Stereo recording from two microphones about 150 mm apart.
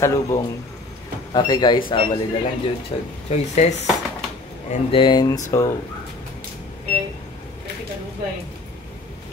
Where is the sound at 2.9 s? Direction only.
35° left (ahead or behind).